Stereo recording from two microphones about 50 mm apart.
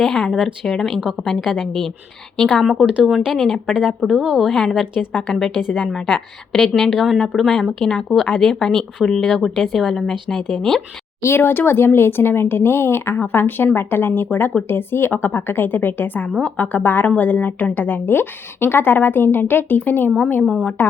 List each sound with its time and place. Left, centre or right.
0.0 s a woman's voice: centre
4.4 s a woman's voice: centre
4.7 s a woman's voice: centre
11.2 s a woman's voice: left